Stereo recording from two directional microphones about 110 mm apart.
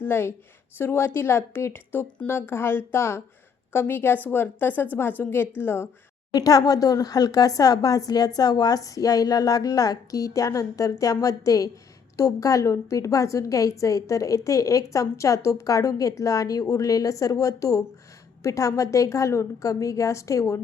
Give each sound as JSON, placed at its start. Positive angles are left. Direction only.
{"t": 0.0, "sound": "a woman's voice", "side_deg": 20}
{"t": 6.3, "sound": "a woman's voice", "side_deg": 35}